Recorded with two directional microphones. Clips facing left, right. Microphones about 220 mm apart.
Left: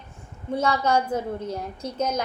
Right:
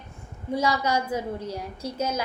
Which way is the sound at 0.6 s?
10° right (ahead or behind).